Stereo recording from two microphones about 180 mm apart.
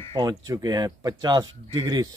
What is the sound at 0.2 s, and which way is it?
Speech, 25° right (ahead or behind).